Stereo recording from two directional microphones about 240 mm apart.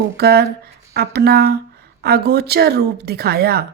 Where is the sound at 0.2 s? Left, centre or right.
Right.